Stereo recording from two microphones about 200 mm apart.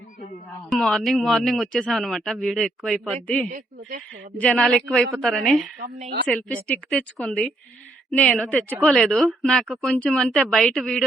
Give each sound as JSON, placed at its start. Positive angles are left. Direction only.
{"t": 0.7, "sound": "a man's voice", "side_deg": 0}
{"t": 3.5, "sound": "speech", "side_deg": -45}
{"t": 4.4, "sound": "a man's voice", "side_deg": 0}